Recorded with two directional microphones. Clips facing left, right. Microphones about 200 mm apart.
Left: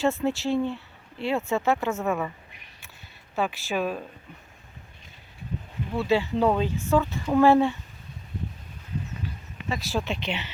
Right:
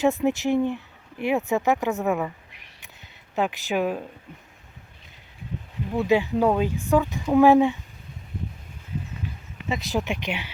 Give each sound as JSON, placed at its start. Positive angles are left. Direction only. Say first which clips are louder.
{"t": 0.0, "sound": "speech", "louder": "right 3 dB", "side_deg": -15}
{"t": 2.8, "sound": "a sound", "louder": "right 1 dB", "side_deg": -20}
{"t": 5.9, "sound": "speech", "louder": "right 3 dB", "side_deg": -15}
{"t": 9.6, "sound": "speech", "louder": "right 2 dB", "side_deg": -20}